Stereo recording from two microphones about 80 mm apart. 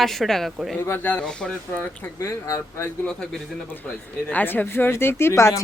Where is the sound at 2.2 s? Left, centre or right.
Left.